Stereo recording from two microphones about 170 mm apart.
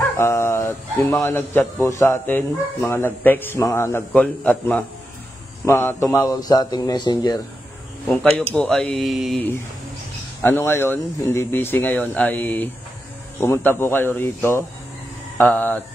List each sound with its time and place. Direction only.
0.2 s a man's voice: 15° left (ahead or behind)
8.5 s speech: 5° left (ahead or behind)
10.4 s a man's voice: 15° left (ahead or behind)